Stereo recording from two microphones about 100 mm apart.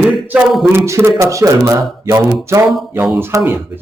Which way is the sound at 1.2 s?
30° right (ahead or behind).